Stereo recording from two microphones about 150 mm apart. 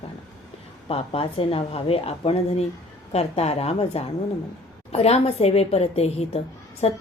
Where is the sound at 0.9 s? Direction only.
40° left (ahead or behind).